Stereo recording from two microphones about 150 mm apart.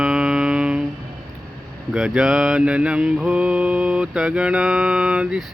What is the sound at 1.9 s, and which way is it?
Mantra, 5° right (ahead or behind).